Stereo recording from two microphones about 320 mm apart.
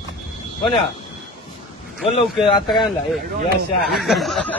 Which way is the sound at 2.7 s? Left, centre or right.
Centre.